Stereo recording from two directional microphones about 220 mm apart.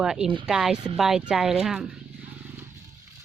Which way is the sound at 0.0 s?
5° right (ahead or behind).